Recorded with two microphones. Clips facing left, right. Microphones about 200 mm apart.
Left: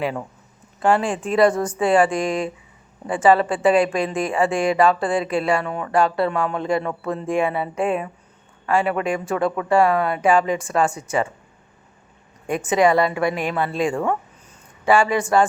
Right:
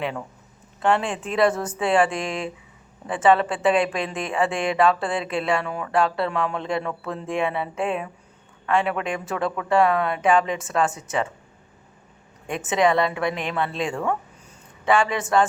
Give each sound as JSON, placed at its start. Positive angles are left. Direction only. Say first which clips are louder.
{"t": 0.8, "sound": "speech", "louder": "left 3 dB", "side_deg": 0}
{"t": 12.5, "sound": "speech", "louder": "left 3 dB", "side_deg": 0}